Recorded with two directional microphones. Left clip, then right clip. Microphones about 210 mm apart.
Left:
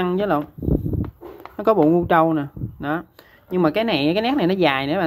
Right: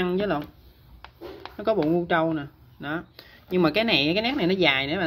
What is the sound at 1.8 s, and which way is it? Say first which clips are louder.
Speech: left 7 dB; 25° left (ahead or behind).